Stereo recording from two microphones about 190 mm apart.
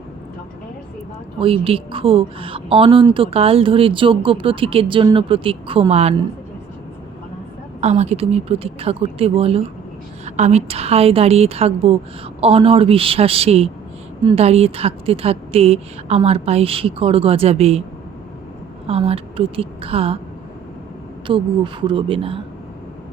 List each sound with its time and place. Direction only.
1.4 s speech: 30° right (ahead or behind)
7.8 s a woman's voice: 35° right (ahead or behind)
18.9 s a woman's voice: 30° right (ahead or behind)
21.2 s speech: 25° right (ahead or behind)